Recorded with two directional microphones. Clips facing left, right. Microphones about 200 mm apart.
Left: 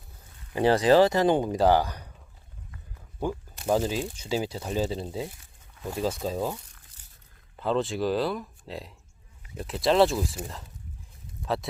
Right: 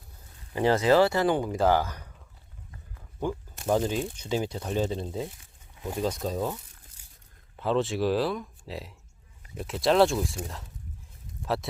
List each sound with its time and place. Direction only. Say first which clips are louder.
0.5 s speech: left 2 dB; 15° left (ahead or behind)
3.2 s speech: even; 10° left (ahead or behind)
7.0 s crunch: even; 10° right (ahead or behind)
7.5 s speech: even; centre (ahead or behind)